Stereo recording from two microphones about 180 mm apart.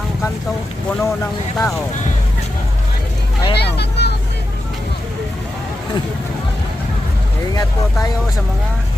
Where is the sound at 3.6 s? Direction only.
65° left (ahead or behind).